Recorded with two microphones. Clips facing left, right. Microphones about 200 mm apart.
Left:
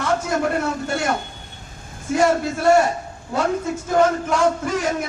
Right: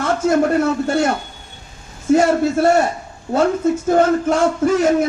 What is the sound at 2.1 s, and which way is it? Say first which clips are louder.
Speech: right 4 dB; 40° right (ahead or behind).